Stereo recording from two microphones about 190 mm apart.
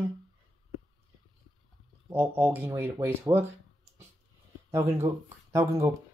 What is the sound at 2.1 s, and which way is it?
Speech, 10° right (ahead or behind).